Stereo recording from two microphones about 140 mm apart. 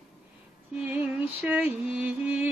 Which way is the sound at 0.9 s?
10° right (ahead or behind).